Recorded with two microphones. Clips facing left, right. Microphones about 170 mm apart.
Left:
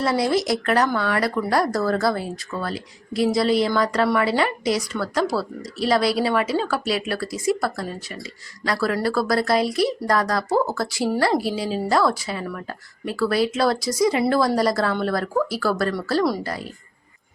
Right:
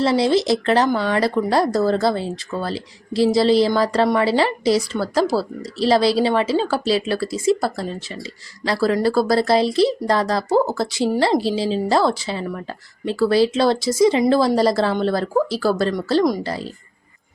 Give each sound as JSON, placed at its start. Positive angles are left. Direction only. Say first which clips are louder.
{"t": 0.0, "sound": "speech", "louder": "right 4 dB", "side_deg": -25}